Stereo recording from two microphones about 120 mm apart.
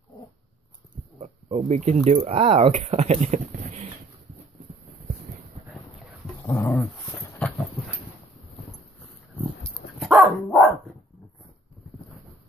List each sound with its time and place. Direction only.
1.2 s a sound: 55° right (ahead or behind)
1.8 s speech: 80° right
6.4 s dog: 20° left (ahead or behind)
7.4 s dog: 10° left (ahead or behind)
9.9 s dog: 10° right (ahead or behind)